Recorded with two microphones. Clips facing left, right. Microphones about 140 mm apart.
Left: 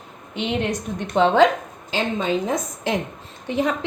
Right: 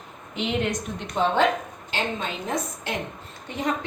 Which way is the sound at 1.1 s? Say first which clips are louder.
Left 6 dB; 90° left.